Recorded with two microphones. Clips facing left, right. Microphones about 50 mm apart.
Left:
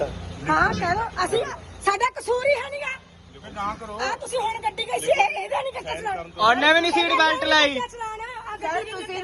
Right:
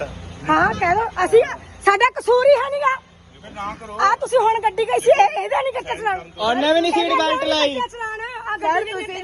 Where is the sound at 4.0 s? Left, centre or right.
Right.